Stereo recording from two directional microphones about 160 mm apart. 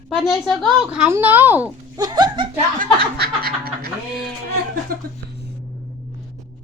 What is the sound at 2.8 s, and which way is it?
Snicker, 75° right (ahead or behind).